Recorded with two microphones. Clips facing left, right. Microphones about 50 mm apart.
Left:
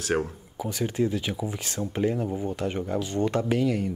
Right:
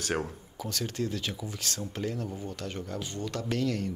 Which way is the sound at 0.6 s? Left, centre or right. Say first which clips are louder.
Left 7 dB; centre.